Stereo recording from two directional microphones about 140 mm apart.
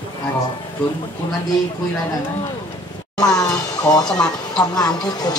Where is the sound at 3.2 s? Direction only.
25° left (ahead or behind).